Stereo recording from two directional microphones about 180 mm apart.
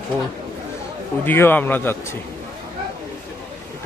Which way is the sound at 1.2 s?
10° left (ahead or behind).